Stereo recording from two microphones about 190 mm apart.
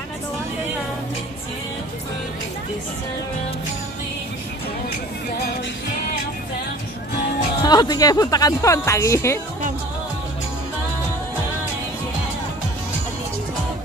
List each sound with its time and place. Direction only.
7.6 s speech: 20° left (ahead or behind)